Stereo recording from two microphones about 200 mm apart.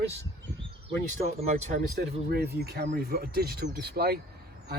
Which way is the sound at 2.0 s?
50° right (ahead or behind).